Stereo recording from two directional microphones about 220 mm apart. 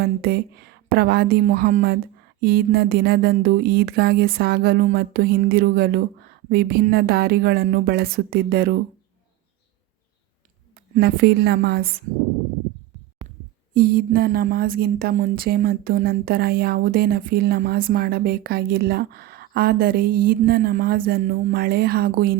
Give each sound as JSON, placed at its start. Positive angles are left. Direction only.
{"t": 0.0, "sound": "speech", "side_deg": -45}
{"t": 10.9, "sound": "speech", "side_deg": -45}
{"t": 13.7, "sound": "speech", "side_deg": -45}